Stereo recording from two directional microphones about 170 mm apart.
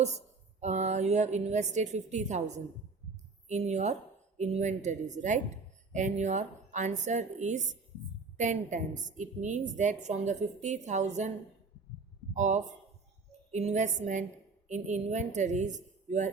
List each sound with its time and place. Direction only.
0.6 s a woman's voice: 40° right (ahead or behind)
3.5 s a woman's voice: 40° right (ahead or behind)
12.3 s a woman's voice: 45° right (ahead or behind)